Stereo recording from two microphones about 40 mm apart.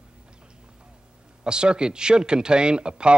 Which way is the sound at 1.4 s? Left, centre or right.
Right.